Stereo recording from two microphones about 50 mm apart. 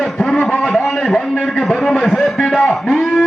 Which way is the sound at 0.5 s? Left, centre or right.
Centre.